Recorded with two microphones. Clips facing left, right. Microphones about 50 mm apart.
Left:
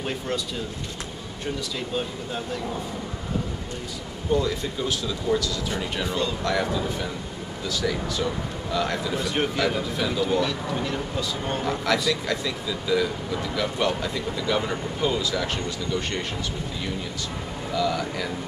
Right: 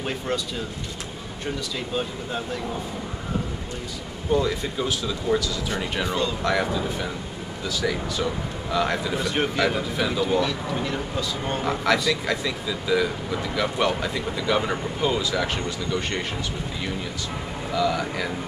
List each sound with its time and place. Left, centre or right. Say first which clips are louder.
4.3 s speech: right 1 dB; centre
5.7 s speech: right 1 dB; right
6.1 s speech: right 1 dB; centre
10.2 s speech: right 1 dB; centre
11.6 s speech: right 2 dB; centre
17.7 s speech: right 2 dB; centre